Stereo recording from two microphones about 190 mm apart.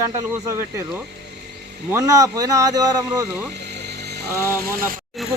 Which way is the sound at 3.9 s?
60° right (ahead or behind).